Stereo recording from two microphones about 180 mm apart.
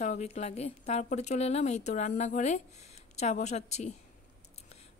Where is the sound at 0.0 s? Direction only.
40° left (ahead or behind).